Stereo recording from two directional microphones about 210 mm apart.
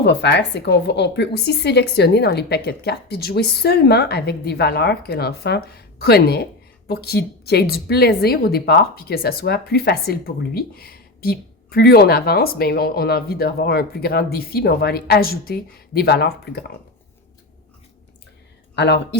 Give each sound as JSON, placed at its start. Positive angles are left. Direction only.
{"t": 0.0, "sound": "a woman's voice", "side_deg": 55}